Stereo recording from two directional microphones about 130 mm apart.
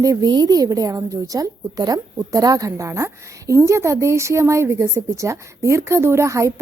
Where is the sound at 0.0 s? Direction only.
30° right (ahead or behind).